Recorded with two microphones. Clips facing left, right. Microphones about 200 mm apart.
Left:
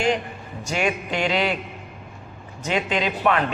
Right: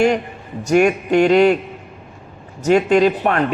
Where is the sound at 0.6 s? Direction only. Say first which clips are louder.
Right 10 dB; 55° right (ahead or behind).